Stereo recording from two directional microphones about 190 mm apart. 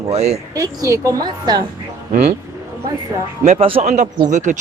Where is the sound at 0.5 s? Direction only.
15° right (ahead or behind).